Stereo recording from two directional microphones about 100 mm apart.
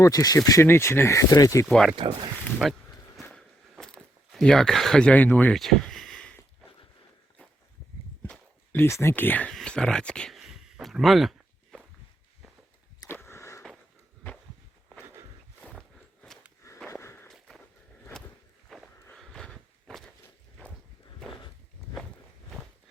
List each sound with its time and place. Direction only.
0.0 s speech: 40° left (ahead or behind)
1.6 s speech: 5° left (ahead or behind)
2.0 s speech: 50° right (ahead or behind)
2.6 s speech: 5° right (ahead or behind)
3.3 s biting: 5° left (ahead or behind)
5.5 s a sound: 5° left (ahead or behind)
8.7 s speech: 25° left (ahead or behind)
9.5 s a sound: 5° left (ahead or behind)
13.1 s a sound: 25° left (ahead or behind)
16.9 s walk: 25° left (ahead or behind)
17.2 s walk: centre (ahead or behind)
18.7 s walk: centre (ahead or behind)
19.1 s a sound: 5° left (ahead or behind)